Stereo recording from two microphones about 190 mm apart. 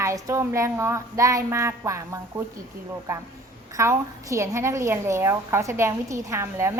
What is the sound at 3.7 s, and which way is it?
A woman's voice, 15° right (ahead or behind).